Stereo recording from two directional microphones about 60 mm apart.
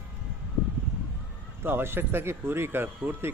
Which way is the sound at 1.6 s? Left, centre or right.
Right.